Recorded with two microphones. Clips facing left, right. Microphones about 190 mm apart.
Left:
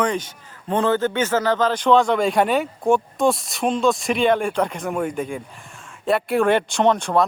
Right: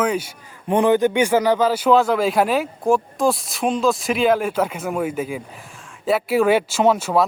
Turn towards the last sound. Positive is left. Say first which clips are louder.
# right 1 dB
turn(degrees=-5)  # may be behind; listen again after turning